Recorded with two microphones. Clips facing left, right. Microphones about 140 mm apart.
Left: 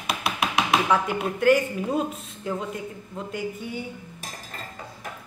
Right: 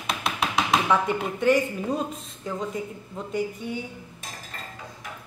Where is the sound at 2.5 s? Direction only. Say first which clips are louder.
Even; 5° left (ahead or behind).